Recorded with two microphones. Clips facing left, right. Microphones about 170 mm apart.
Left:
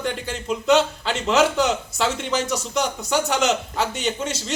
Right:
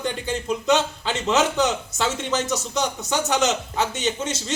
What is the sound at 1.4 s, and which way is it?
Speech, 10° left (ahead or behind).